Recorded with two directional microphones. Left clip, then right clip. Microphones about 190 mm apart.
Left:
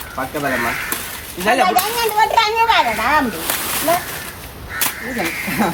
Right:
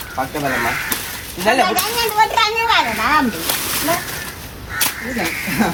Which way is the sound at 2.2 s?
60° left (ahead or behind).